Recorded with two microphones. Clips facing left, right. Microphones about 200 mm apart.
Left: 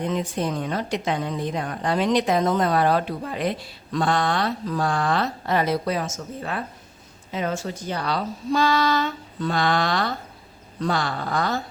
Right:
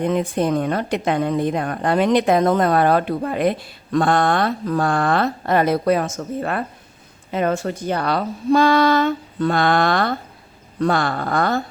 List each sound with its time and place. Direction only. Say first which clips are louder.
0.0 s a woman's voice: right 6 dB; 55° right (ahead or behind)